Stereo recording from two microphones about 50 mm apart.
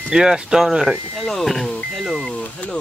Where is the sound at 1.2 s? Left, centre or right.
Centre.